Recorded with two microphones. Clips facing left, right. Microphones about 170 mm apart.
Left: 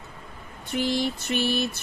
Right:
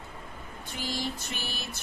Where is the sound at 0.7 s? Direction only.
65° left (ahead or behind).